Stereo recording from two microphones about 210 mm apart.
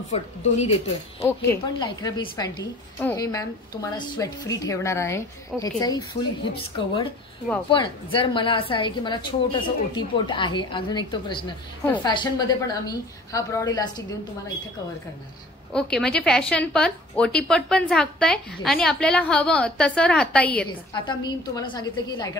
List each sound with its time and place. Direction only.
0.1 s a woman's voice: 30° left (ahead or behind)
1.2 s a woman's voice: 20° left (ahead or behind)
15.7 s a woman's voice: 5° left (ahead or behind)
20.9 s a woman's voice: 20° left (ahead or behind)